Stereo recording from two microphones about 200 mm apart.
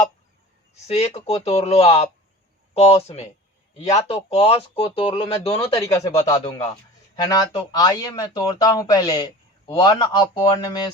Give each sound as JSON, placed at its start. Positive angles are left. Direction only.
{"t": 0.7, "sound": "speech", "side_deg": 30}
{"t": 5.7, "sound": "speech", "side_deg": 15}